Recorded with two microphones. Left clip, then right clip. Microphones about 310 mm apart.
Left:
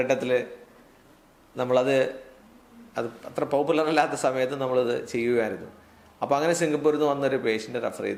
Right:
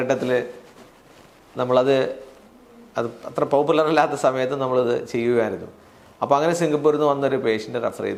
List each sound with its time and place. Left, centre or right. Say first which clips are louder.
0.0 s a man's voice: right 3 dB; centre
1.5 s a man's voice: right 4 dB; centre